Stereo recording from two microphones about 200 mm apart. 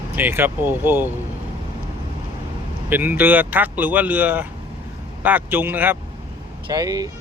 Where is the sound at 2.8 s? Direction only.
10° right (ahead or behind).